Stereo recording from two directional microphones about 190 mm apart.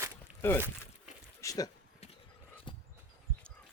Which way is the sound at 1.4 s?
20° left (ahead or behind).